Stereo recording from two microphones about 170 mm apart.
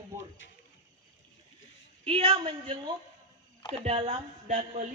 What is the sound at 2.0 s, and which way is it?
A woman's voice, 35° right (ahead or behind).